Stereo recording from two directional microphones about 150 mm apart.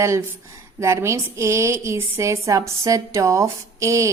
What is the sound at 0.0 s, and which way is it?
A woman's voice, 20° right (ahead or behind).